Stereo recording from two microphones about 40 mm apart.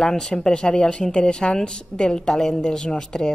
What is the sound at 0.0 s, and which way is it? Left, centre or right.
A woman's voice, centre.